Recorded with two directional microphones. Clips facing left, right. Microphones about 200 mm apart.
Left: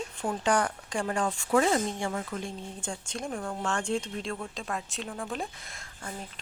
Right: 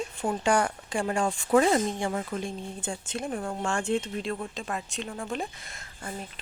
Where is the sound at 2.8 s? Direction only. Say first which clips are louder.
Right 3 dB; 5° right (ahead or behind).